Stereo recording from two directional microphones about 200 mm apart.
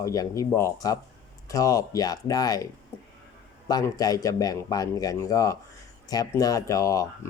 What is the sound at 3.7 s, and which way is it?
Speech, 20° left (ahead or behind).